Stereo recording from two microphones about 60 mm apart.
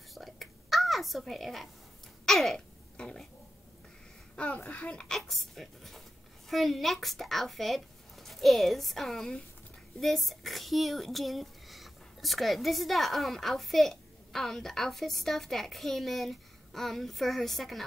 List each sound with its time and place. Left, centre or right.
0.1 s a sound: centre
3.0 s speech: centre
4.7 s speech: centre
5.3 s speech: centre